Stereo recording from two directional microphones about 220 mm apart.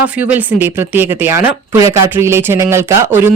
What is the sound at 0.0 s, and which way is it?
Speech, 5° right (ahead or behind).